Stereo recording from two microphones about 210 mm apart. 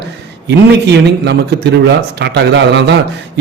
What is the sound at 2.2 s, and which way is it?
Speech, 55° right (ahead or behind).